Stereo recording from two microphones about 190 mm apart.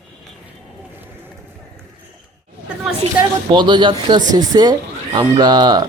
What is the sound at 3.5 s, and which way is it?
Speech, 25° right (ahead or behind).